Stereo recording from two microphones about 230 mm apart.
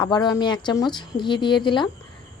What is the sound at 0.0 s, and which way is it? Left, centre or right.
Speech, centre.